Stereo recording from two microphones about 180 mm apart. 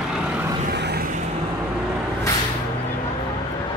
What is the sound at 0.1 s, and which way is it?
Vehicle, 5° right (ahead or behind).